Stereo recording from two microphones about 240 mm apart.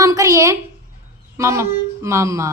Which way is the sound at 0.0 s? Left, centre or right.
Centre.